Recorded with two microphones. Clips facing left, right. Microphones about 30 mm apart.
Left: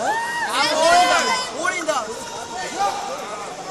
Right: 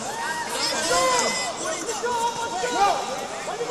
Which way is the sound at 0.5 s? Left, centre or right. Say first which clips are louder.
Left 10 dB; left.